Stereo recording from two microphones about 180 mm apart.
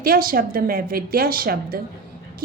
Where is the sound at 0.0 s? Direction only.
55° right (ahead or behind).